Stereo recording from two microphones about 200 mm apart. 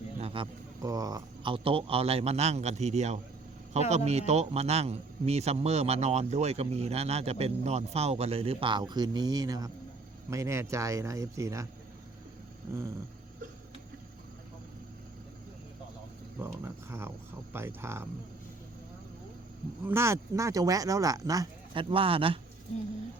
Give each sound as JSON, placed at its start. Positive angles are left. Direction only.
{"t": 0.2, "sound": "a man's voice", "side_deg": -25}
{"t": 16.4, "sound": "speech", "side_deg": -10}
{"t": 19.8, "sound": "speech", "side_deg": -10}